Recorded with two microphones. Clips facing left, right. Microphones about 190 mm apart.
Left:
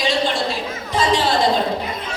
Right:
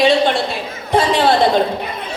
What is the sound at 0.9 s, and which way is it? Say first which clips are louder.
Chatter: right 5 dB; 60° right (ahead or behind).